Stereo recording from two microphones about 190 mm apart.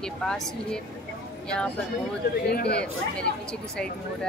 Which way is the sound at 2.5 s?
60° left (ahead or behind).